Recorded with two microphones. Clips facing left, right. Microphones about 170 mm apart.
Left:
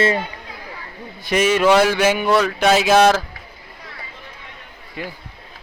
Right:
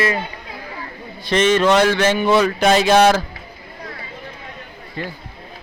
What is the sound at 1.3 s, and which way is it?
A man's voice, 10° left (ahead or behind).